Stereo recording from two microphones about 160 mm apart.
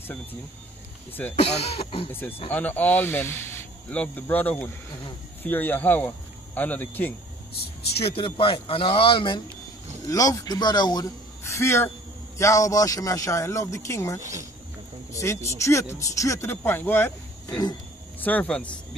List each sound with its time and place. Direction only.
0.0 s speech: 10° left (ahead or behind)
1.3 s speech: 40° left (ahead or behind)
2.5 s speech: 10° left (ahead or behind)
8.0 s speech: 35° left (ahead or behind)
10.0 s a man's voice: 20° left (ahead or behind)
15.5 s speech: 20° left (ahead or behind)
17.5 s a man's voice: 25° left (ahead or behind)
18.2 s speech: 10° left (ahead or behind)